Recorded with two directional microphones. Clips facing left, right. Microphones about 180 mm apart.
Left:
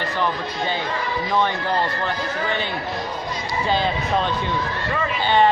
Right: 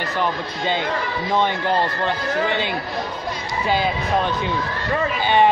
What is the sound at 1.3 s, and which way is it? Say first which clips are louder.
Speech: right 2 dB; 20° right (ahead or behind).